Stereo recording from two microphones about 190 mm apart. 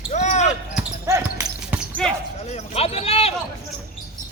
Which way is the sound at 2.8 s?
30° left (ahead or behind).